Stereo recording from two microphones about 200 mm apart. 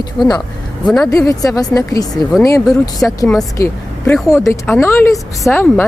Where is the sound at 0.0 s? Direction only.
20° left (ahead or behind).